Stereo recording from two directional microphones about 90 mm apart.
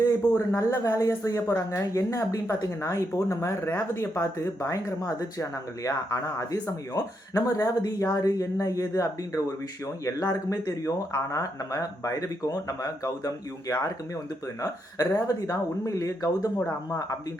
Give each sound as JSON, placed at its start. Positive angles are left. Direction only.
{"t": 0.0, "sound": "a woman's voice", "side_deg": 35}